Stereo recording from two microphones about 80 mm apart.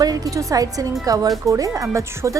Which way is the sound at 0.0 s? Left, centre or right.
Right.